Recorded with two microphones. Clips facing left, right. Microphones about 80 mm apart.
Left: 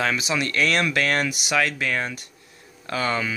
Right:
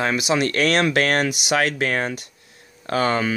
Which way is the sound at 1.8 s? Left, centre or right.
Right.